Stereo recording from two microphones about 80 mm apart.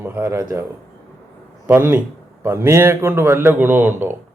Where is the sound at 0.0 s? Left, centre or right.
Right.